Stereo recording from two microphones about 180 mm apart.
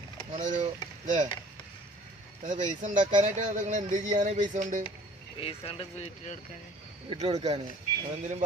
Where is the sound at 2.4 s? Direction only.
45° right (ahead or behind).